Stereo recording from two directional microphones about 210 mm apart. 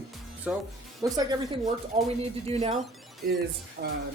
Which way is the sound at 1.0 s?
20° right (ahead or behind).